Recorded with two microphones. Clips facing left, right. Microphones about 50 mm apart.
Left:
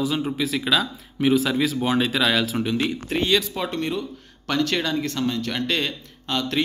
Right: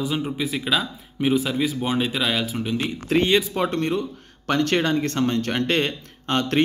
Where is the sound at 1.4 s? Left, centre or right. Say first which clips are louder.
Left 2 dB; left.